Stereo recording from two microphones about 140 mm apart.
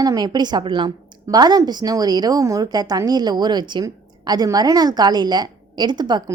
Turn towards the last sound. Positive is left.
turn(degrees=-30)  # may be behind; listen again after turning